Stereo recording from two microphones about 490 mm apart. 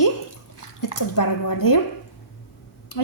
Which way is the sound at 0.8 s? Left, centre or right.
Left.